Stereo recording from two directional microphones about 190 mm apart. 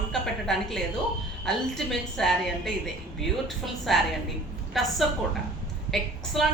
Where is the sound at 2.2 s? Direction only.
Centre (ahead or behind).